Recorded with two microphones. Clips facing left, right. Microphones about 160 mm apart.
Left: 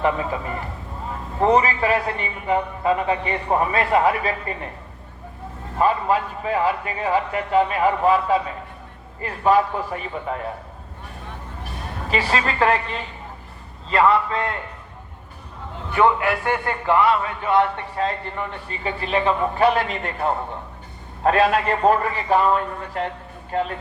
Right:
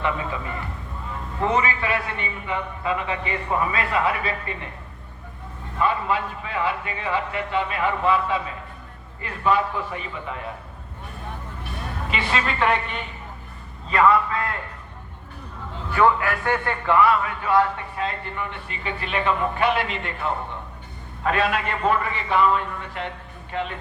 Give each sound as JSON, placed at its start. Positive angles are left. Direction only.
{"t": 0.0, "sound": "a man's voice", "side_deg": 40}
{"t": 5.7, "sound": "a man's voice", "side_deg": 40}
{"t": 11.6, "sound": "a woman's voice", "side_deg": 40}
{"t": 15.9, "sound": "a man's voice", "side_deg": 20}
{"t": 17.9, "sound": "a man's voice", "side_deg": 35}